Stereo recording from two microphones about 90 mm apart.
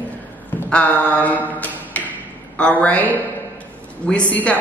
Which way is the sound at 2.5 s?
15° left (ahead or behind).